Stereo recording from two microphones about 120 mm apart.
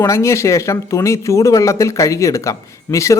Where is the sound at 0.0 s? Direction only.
25° left (ahead or behind).